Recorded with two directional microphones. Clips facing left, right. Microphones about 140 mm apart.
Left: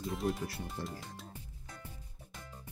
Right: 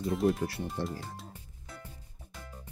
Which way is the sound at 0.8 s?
75° right (ahead or behind).